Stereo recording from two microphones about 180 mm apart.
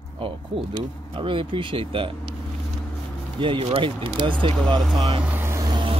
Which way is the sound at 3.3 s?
30° right (ahead or behind).